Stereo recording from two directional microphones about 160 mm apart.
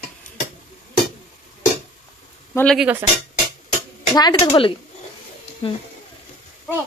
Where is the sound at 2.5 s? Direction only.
5° left (ahead or behind).